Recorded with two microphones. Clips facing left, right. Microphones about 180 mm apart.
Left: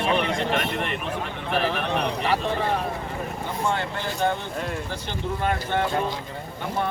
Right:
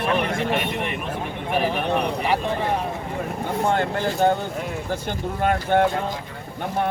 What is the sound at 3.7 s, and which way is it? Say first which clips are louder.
Speech: right 5 dB; 50° right (ahead or behind).